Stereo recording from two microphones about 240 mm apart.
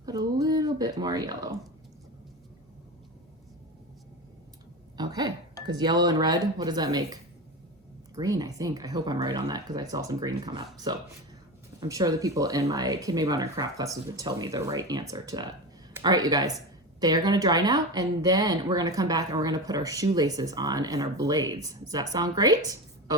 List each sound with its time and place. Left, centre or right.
0.0 s speech: centre
4.9 s a sound: centre
5.6 s speech: centre
11.8 s speech: centre